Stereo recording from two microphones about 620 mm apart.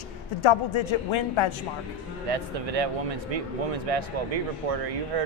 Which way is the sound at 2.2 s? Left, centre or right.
Right.